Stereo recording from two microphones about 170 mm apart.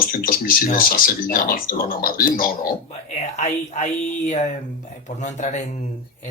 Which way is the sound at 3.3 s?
45° left (ahead or behind).